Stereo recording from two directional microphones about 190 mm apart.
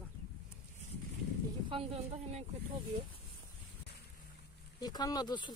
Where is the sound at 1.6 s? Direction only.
30° right (ahead or behind).